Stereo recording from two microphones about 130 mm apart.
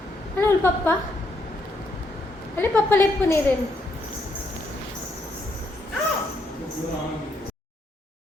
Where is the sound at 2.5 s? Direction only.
15° left (ahead or behind).